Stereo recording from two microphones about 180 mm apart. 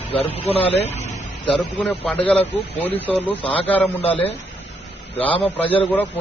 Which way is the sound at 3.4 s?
30° left (ahead or behind).